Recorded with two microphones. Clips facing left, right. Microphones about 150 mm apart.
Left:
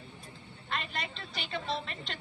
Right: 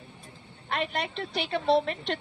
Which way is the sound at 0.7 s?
65° right (ahead or behind).